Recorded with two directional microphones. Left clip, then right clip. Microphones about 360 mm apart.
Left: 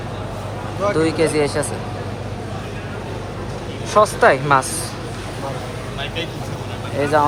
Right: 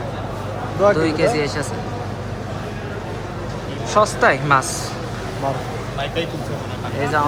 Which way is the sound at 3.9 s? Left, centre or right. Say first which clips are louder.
Left 2 dB; centre.